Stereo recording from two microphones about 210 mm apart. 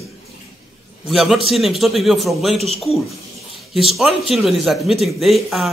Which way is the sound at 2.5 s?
30° right (ahead or behind).